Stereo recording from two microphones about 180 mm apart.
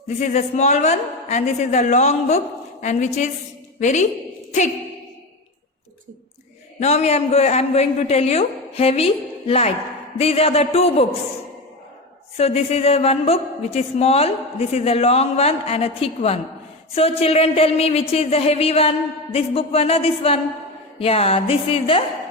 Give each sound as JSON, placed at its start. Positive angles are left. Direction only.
{"t": 0.2, "sound": "a man's voice", "side_deg": 40}
{"t": 6.7, "sound": "a man's voice", "side_deg": 40}
{"t": 12.4, "sound": "a man's voice", "side_deg": 35}